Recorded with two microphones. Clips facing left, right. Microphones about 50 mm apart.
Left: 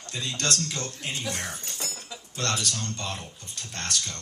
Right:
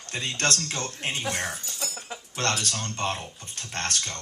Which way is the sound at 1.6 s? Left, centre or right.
Left.